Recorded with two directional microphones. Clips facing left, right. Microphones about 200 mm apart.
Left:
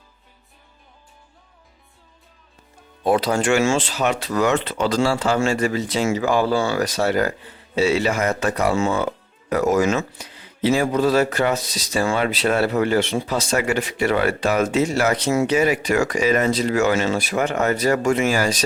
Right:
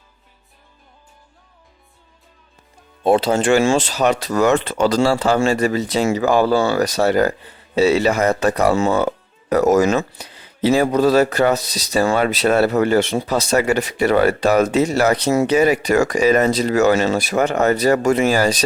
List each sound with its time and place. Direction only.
3.0 s speech: 25° right (ahead or behind)